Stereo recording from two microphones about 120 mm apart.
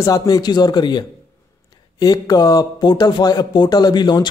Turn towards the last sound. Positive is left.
turn(degrees=35)  # may be behind; listen again after turning